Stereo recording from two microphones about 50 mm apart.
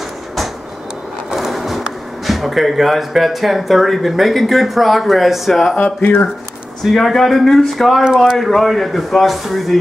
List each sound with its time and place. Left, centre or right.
1.3 s speech: centre
5.9 s speech: left
6.8 s a man's voice: centre